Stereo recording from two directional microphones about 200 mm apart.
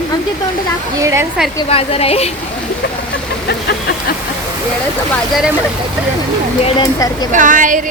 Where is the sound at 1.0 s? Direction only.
15° right (ahead or behind).